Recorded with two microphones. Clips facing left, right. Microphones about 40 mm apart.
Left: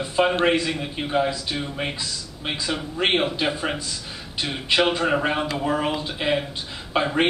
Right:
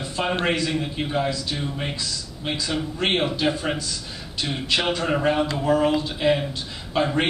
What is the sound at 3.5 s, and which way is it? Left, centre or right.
A man's voice, centre.